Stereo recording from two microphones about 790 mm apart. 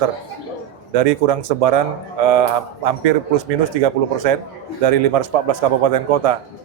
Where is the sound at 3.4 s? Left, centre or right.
Right.